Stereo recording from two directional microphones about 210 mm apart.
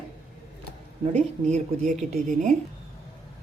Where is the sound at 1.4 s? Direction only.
35° right (ahead or behind).